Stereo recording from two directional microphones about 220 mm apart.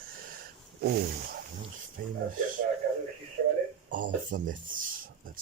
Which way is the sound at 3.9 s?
40° right (ahead or behind).